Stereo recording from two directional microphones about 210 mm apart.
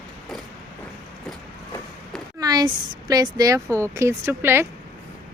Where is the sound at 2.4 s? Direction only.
20° right (ahead or behind).